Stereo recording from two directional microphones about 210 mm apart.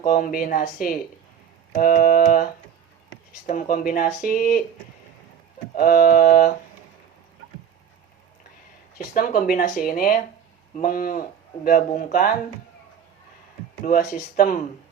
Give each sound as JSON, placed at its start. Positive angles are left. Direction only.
{"t": 0.0, "sound": "speech", "side_deg": 40}
{"t": 5.7, "sound": "speech", "side_deg": 45}
{"t": 9.0, "sound": "speech", "side_deg": 40}
{"t": 13.8, "sound": "speech", "side_deg": 40}